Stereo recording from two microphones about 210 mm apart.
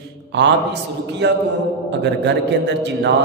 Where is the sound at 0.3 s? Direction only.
55° right (ahead or behind).